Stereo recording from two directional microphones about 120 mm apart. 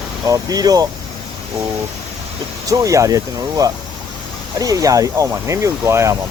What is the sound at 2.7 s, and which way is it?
Speech, 30° right (ahead or behind).